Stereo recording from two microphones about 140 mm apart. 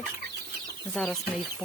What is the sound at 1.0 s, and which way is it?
Speech, 5° left (ahead or behind).